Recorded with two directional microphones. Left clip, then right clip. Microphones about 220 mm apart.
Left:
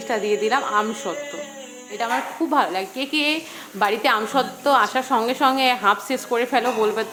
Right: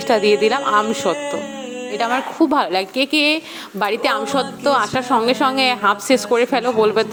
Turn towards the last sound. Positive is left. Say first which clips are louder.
# right 5 dB
turn(degrees=-35)  # may be behind; listen again after turning